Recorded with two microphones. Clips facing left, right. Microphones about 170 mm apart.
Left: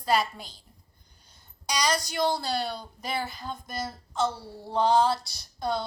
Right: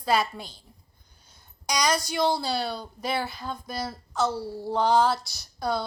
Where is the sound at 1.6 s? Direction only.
15° right (ahead or behind).